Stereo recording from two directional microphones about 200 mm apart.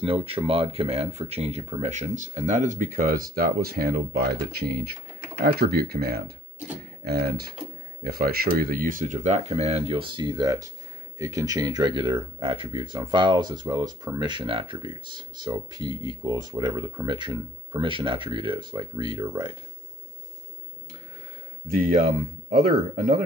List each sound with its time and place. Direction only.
0.0 s speech: 30° right (ahead or behind)
21.6 s speech: 45° right (ahead or behind)